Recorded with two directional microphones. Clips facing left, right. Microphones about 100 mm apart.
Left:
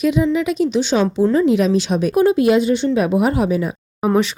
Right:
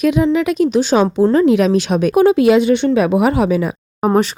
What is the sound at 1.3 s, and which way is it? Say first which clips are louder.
Speech: right 3 dB; 65° right (ahead or behind).